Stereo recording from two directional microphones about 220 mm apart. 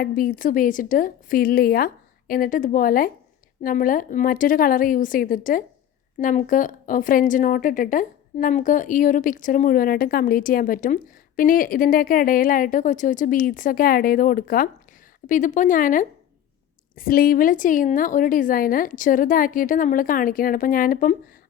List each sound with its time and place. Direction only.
0.0 s a woman's voice: 40° left (ahead or behind)